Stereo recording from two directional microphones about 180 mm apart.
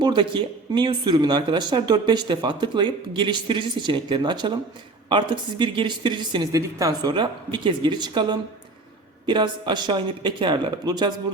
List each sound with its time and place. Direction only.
0.0 s speech: 25° right (ahead or behind)